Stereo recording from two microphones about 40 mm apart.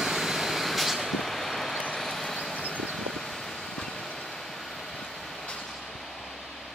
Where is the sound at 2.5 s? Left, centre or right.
Left.